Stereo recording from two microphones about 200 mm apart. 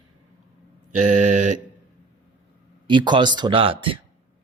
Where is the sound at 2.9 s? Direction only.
25° right (ahead or behind).